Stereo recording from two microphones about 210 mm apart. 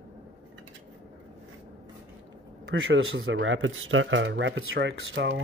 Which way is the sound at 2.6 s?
65° right (ahead or behind).